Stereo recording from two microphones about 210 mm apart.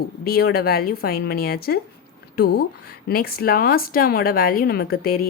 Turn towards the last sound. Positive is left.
turn(degrees=45)  # may be behind; listen again after turning